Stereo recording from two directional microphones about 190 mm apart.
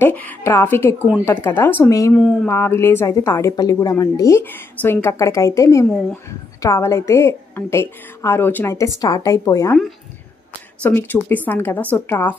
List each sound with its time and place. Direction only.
0.0 s a woman's voice: 10° left (ahead or behind)
10.8 s a woman's voice: 10° left (ahead or behind)